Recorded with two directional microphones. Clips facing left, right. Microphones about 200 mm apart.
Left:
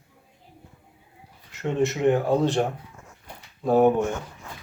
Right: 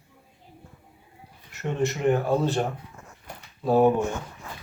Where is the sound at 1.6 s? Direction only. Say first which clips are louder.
Left 3 dB; 20° left (ahead or behind).